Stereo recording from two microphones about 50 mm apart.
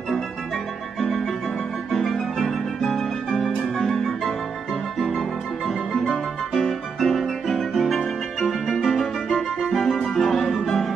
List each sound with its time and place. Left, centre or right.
1.9 s music: centre
6.5 s music: centre